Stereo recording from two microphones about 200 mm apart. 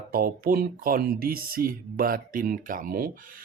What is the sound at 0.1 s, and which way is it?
Speech, 45° right (ahead or behind).